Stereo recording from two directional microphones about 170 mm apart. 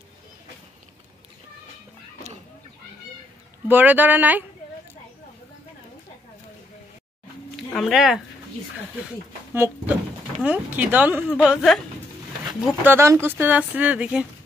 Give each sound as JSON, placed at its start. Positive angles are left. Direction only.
{"t": 3.6, "sound": "speech", "side_deg": -10}
{"t": 7.5, "sound": "a sound", "side_deg": 0}
{"t": 10.4, "sound": "speech", "side_deg": -10}
{"t": 12.6, "sound": "speech", "side_deg": -10}